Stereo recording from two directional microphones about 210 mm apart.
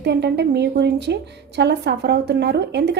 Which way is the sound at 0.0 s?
55° right (ahead or behind).